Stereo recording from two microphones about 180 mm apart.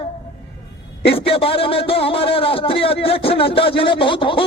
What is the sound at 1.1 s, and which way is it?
Speech, 30° left (ahead or behind).